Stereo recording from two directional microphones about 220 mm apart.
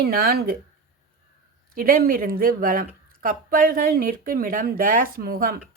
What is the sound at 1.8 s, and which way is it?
Speech, 40° right (ahead or behind).